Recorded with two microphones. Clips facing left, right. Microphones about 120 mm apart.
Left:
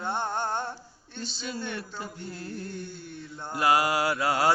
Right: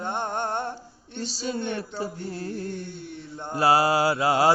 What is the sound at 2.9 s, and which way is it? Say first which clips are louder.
Speech: right 4 dB; 65° right (ahead or behind).